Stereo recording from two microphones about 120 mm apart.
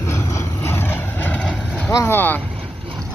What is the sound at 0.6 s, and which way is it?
Vehicle, 20° left (ahead or behind).